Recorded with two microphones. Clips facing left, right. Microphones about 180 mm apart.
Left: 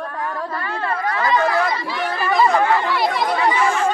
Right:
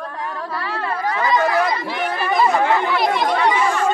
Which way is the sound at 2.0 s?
20° right (ahead or behind).